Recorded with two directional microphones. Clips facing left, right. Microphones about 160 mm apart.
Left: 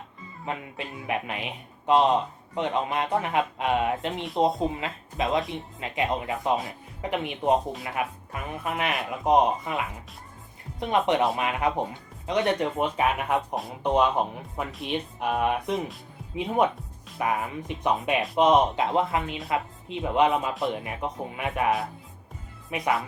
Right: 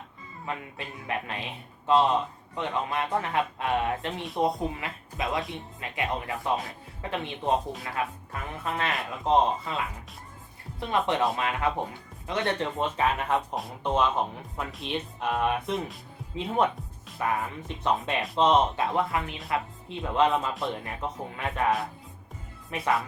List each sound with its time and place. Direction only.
0.4 s speech: 20° left (ahead or behind)
22.7 s speech: 15° left (ahead or behind)